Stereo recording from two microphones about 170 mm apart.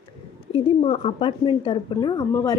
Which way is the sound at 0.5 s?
35° left (ahead or behind).